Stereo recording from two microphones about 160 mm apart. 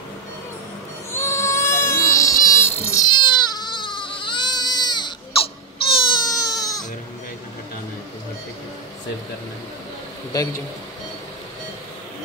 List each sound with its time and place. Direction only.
1.1 s baby cry: 15° left (ahead or behind)
2.4 s insect: 15° left (ahead or behind)
3.2 s baby cry: 25° left (ahead or behind)
10.3 s a man's voice: 20° left (ahead or behind)